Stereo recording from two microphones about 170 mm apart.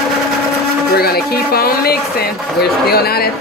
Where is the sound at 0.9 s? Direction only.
65° left (ahead or behind).